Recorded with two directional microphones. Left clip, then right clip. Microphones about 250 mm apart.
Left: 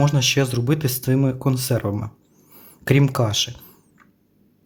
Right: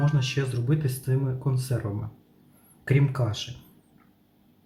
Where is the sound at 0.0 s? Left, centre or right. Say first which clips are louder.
Left 10 dB; left.